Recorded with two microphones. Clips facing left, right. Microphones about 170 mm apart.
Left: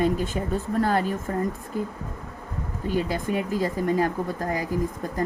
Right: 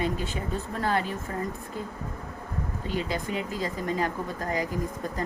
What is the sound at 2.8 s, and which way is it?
Speech, 50° left (ahead or behind).